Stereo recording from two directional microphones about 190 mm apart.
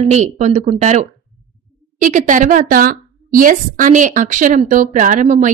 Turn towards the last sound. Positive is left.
turn(degrees=-40)  # may be behind; listen again after turning